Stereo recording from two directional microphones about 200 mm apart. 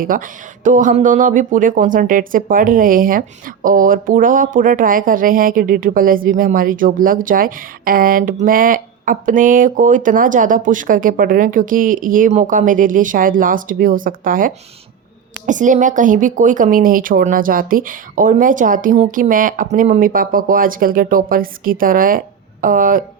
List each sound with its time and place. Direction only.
0.0 s speech: 45° right (ahead or behind)